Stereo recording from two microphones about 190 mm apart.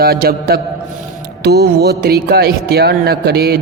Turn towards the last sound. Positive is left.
turn(degrees=-55)  # may be behind; listen again after turning